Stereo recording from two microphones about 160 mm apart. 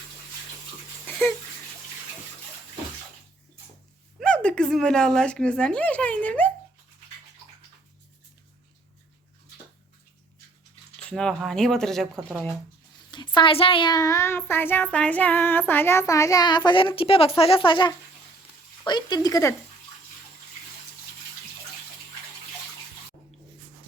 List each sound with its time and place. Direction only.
4.2 s speech: 5° left (ahead or behind)
11.1 s speech: 5° left (ahead or behind)
13.1 s a woman's voice: 25° left (ahead or behind)